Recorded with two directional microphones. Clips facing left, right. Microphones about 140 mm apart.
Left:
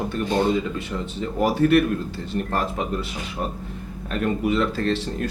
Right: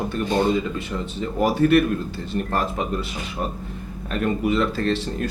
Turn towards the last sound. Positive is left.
turn(degrees=-10)  # may be behind; listen again after turning